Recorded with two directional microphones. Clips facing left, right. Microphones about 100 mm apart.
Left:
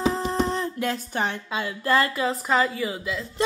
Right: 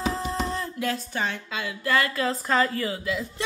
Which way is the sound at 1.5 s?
35° left (ahead or behind).